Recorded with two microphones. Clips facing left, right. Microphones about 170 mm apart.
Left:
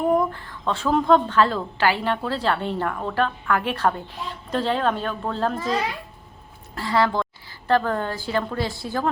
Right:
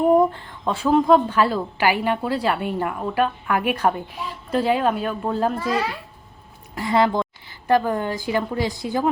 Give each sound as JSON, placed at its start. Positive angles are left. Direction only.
{"t": 0.1, "sound": "a sound", "side_deg": -20}
{"t": 0.9, "sound": "a woman's voice", "side_deg": -10}
{"t": 6.7, "sound": "a woman's voice", "side_deg": -20}